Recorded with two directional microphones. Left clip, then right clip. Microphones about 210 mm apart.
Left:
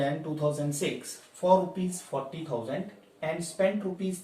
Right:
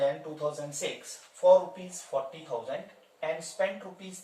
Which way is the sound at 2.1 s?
10° left (ahead or behind).